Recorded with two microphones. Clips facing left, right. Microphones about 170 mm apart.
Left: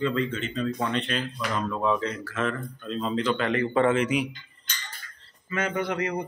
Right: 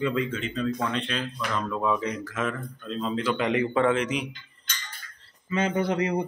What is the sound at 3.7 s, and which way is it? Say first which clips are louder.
Speech: left 4 dB; 5° left (ahead or behind).